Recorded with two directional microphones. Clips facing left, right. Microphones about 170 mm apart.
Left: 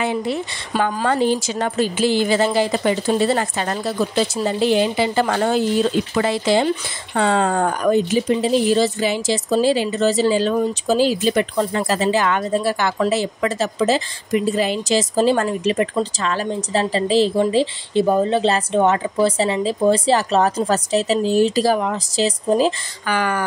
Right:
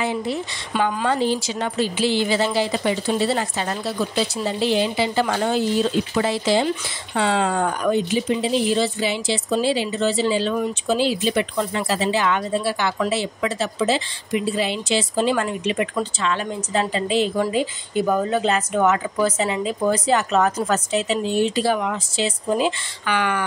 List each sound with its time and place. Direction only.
0.7 s speech: 50° left (ahead or behind)
7.2 s speech: 50° left (ahead or behind)